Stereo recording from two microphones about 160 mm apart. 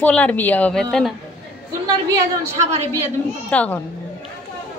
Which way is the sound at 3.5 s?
10° left (ahead or behind).